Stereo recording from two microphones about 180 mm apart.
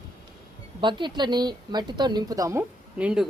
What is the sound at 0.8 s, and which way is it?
A woman's voice, 25° right (ahead or behind).